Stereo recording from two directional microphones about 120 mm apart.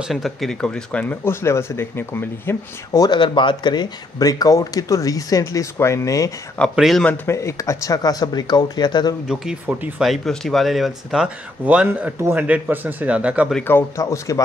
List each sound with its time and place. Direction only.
0.1 s speech: centre (ahead or behind); by 3.1 s 25° left (ahead or behind)
3.1 s speech: 40° left (ahead or behind)
6.7 s speech: centre (ahead or behind)
7.2 s speech: 25° left (ahead or behind)
9.3 s a man's voice: 5° right (ahead or behind)
10.0 s a man's voice: centre (ahead or behind)
13.7 s speech: 20° left (ahead or behind)